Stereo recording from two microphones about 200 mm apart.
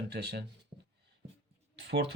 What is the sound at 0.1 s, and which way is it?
Speech, 55° right (ahead or behind).